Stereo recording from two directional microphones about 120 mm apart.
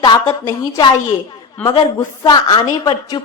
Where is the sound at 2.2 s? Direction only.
40° left (ahead or behind).